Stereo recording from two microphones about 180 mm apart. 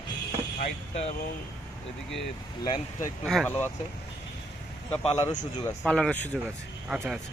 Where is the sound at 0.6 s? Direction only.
35° left (ahead or behind).